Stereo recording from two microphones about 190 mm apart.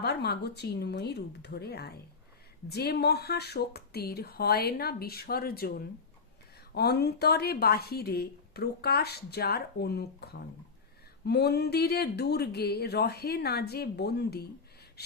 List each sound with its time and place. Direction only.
0.0 s speech: 60° left (ahead or behind)